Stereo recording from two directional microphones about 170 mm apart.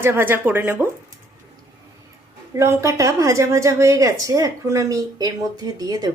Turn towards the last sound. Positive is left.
turn(degrees=-20)  # may be behind; listen again after turning